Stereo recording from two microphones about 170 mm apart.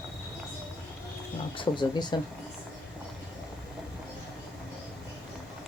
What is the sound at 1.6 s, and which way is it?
Speech, 25° left (ahead or behind).